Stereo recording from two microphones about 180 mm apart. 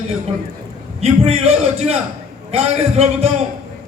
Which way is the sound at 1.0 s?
35° right (ahead or behind).